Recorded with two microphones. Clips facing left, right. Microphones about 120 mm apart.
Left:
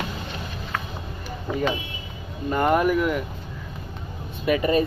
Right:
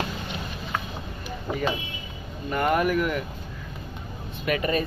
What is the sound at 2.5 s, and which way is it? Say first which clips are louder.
Speech: left 3 dB; 20° left (ahead or behind).